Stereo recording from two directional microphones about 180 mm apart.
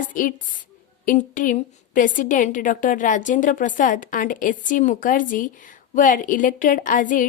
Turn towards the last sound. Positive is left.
turn(degrees=45)  # may be behind; listen again after turning